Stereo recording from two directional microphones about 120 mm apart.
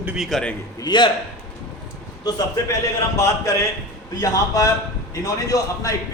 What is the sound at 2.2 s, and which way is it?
A man's voice, 25° left (ahead or behind).